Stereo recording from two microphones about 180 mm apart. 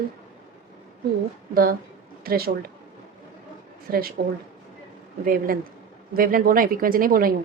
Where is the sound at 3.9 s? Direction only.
55° right (ahead or behind).